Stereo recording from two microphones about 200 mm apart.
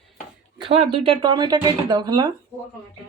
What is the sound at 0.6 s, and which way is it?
Speech, 30° right (ahead or behind).